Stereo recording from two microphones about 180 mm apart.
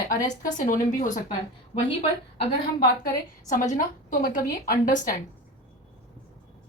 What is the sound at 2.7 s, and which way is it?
Speech, 50° left (ahead or behind).